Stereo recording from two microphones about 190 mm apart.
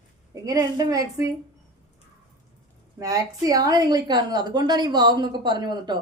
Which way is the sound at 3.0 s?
20° right (ahead or behind).